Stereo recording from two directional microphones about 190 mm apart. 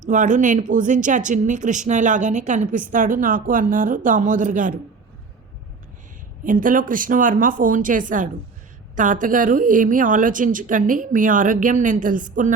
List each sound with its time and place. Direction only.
0.1 s speech: 40° right (ahead or behind)
6.4 s speech: 45° right (ahead or behind)